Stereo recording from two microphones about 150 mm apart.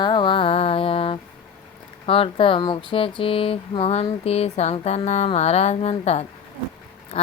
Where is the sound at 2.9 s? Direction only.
35° left (ahead or behind).